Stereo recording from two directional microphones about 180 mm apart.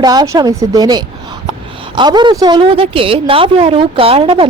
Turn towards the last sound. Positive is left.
turn(degrees=-30)  # may be behind; listen again after turning